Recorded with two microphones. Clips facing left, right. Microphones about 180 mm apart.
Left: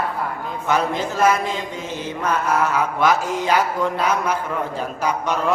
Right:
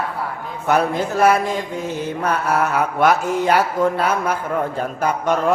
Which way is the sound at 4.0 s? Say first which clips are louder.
Right 1 dB; 50° right (ahead or behind).